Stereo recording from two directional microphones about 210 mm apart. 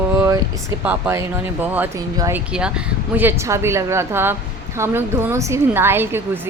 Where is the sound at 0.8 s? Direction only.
5° right (ahead or behind).